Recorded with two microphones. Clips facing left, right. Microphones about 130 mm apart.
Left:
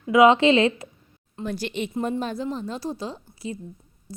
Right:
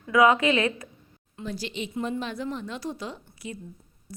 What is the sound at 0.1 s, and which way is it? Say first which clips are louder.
Speech: left 4 dB; 25° left (ahead or behind).